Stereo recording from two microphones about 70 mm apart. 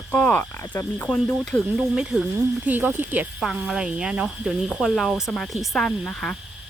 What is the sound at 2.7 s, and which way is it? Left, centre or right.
Speech, right.